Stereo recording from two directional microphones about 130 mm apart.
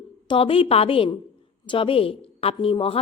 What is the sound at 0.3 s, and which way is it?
A woman's voice, 45° left (ahead or behind).